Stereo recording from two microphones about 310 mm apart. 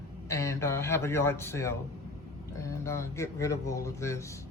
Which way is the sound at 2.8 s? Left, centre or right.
Centre.